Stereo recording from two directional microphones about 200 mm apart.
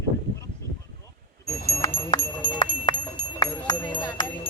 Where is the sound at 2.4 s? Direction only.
25° left (ahead or behind).